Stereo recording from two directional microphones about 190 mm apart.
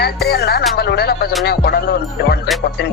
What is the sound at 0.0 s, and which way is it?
Music, 55° left (ahead or behind).